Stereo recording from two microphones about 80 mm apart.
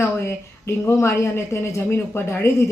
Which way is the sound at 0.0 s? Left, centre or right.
Left.